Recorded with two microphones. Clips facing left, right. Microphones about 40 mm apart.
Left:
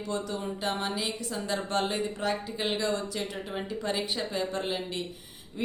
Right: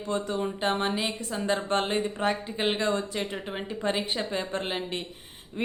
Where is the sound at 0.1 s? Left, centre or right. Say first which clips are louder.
Right 5 dB; right.